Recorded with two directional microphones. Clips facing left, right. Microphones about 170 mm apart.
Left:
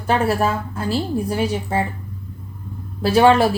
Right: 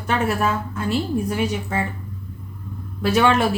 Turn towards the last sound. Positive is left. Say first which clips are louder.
# left 4 dB
turn(degrees=35)  # may be behind; listen again after turning